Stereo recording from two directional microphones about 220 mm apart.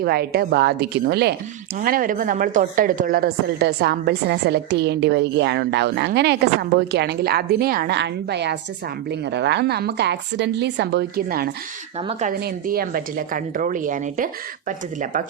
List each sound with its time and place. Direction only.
0.0 s a woman's voice: 45° right (ahead or behind)
11.9 s a woman's voice: 30° right (ahead or behind)
12.3 s a woman's voice: 45° right (ahead or behind)